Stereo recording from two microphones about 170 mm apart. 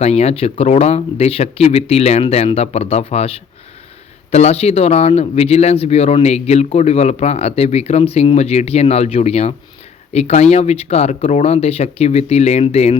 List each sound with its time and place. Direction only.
0.0 s speech: 40° left (ahead or behind)